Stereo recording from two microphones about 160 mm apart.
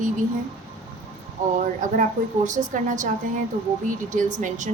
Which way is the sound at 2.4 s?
50° right (ahead or behind).